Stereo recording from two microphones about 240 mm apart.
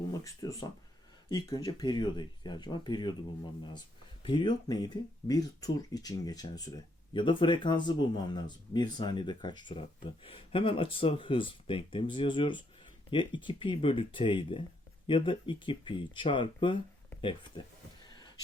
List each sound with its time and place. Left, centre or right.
0.3 s speech: centre